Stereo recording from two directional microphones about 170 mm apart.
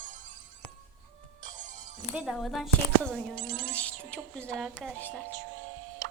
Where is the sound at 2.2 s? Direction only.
Centre (ahead or behind).